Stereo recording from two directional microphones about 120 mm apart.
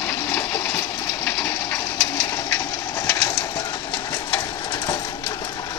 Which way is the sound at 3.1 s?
25° left (ahead or behind).